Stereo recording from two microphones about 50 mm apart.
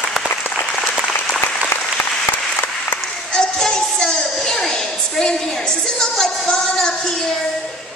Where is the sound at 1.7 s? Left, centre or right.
Left.